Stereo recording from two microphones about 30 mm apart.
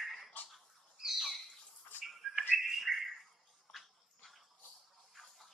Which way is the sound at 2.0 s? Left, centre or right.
Centre.